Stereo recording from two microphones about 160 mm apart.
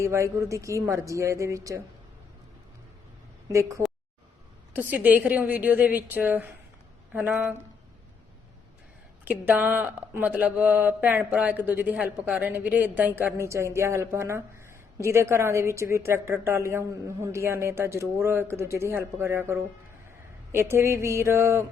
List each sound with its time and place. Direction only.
0.0 s speech: 20° right (ahead or behind)
3.5 s speech: 20° right (ahead or behind)
9.2 s speech: 10° right (ahead or behind)